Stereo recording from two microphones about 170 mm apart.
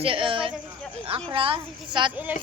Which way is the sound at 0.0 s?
30° right (ahead or behind).